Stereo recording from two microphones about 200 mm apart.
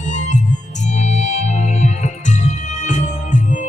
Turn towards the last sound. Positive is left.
turn(degrees=40)  # may be behind; listen again after turning